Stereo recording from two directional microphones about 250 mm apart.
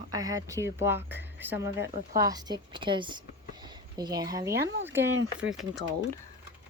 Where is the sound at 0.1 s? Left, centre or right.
Centre.